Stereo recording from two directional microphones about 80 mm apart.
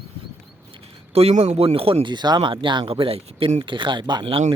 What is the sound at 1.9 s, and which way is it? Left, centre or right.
Speech, right.